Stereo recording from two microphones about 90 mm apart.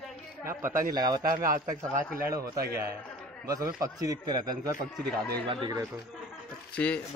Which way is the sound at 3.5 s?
40° right (ahead or behind).